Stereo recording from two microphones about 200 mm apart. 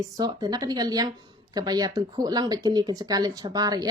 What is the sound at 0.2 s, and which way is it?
A woman's voice, 20° right (ahead or behind).